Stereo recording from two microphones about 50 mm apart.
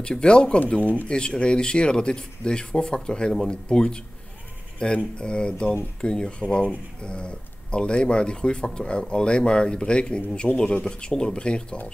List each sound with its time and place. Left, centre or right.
0.0 s speech: centre
0.7 s speech: left
1.0 s speech: centre